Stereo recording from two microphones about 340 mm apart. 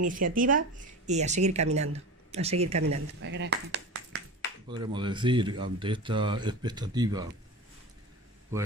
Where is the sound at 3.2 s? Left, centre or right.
Right.